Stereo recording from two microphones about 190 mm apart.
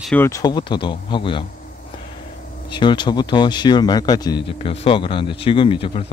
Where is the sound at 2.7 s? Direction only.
25° left (ahead or behind).